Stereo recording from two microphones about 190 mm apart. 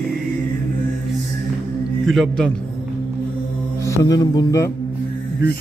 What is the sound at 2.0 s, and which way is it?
Speech, centre (ahead or behind).